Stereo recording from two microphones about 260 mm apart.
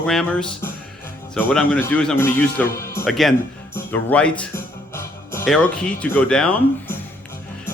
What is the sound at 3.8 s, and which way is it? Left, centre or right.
Music, centre.